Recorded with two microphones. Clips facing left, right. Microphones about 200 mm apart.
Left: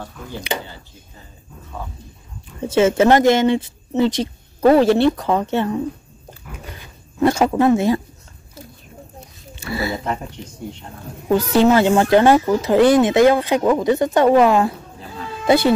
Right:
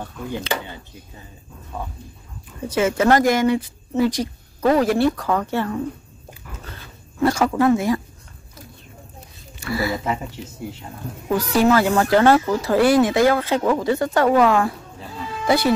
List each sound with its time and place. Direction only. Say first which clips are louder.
0.5 s speech: left 2 dB; 20° left (ahead or behind)
2.7 s speech: left 4 dB; 25° left (ahead or behind)
6.5 s dog: left 3 dB; 15° left (ahead or behind)
9.6 s speech: even; 25° left (ahead or behind)
10.0 s speech: even; 5° right (ahead or behind)
11.2 s speech: left 3 dB; 25° left (ahead or behind)